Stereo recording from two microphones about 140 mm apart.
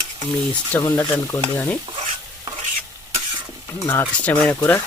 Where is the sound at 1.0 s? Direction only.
30° left (ahead or behind).